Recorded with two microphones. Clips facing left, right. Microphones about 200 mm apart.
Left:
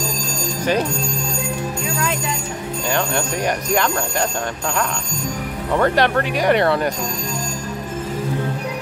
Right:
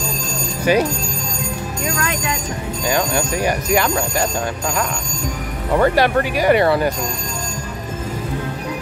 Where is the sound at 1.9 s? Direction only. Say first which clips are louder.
Right 3 dB; 65° right (ahead or behind).